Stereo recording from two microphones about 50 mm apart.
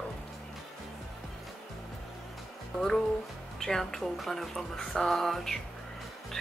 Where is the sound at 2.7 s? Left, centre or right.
Centre.